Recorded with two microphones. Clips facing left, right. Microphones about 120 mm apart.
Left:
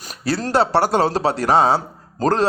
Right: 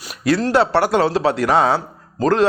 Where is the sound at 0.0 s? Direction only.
40° left (ahead or behind).